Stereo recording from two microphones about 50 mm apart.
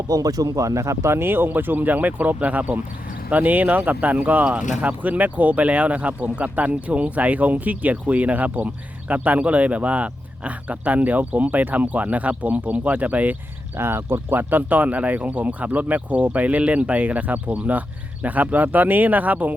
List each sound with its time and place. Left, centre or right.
0.6 s speech: right
13.7 s speech: right